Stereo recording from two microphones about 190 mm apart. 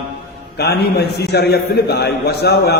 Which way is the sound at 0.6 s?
60° left (ahead or behind).